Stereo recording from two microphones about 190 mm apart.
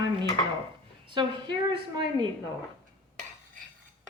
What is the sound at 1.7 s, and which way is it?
Speech, 25° right (ahead or behind).